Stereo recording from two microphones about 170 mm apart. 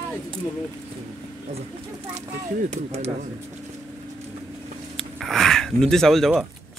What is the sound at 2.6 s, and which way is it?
Speech, 40° right (ahead or behind).